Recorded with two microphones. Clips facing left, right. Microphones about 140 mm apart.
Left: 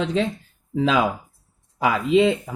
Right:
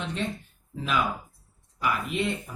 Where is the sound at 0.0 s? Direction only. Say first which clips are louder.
Left 9 dB; 90° left.